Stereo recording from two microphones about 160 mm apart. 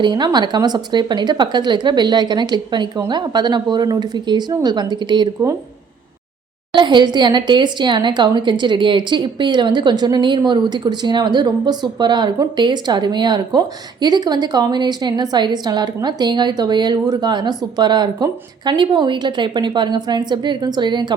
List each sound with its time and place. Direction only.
0.0 s a woman's voice: 25° right (ahead or behind)
6.7 s a woman's voice: 30° right (ahead or behind)